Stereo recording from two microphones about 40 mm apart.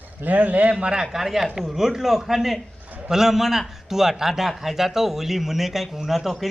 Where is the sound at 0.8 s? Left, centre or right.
Right.